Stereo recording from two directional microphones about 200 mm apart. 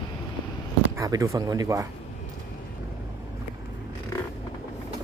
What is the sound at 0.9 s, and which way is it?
Speech, 15° right (ahead or behind).